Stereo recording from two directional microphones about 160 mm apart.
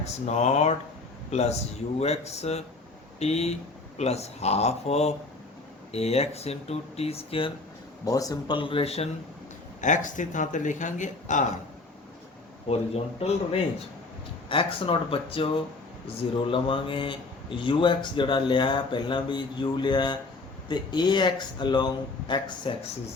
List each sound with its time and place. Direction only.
0.0 s speech: 45° left (ahead or behind)
8.0 s speech: 20° left (ahead or behind); by 9.0 s 40° left (ahead or behind)
9.8 s speech: 50° left (ahead or behind)
12.6 s a man's voice: 40° left (ahead or behind)